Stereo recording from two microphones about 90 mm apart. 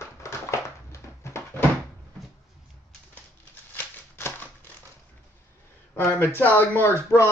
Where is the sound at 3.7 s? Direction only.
25° left (ahead or behind).